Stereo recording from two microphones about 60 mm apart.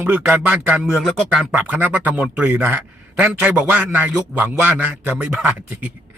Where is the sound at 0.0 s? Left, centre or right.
Right.